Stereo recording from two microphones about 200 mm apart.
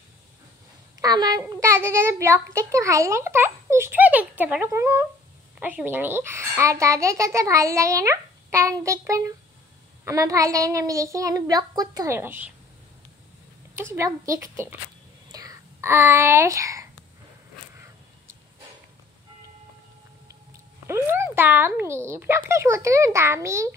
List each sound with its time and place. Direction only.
1.0 s a child's voice: 20° right (ahead or behind)
13.7 s a child's voice: 15° right (ahead or behind)
20.8 s a child's voice: 10° right (ahead or behind)